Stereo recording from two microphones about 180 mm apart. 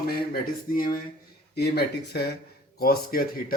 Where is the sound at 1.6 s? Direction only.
65° left (ahead or behind).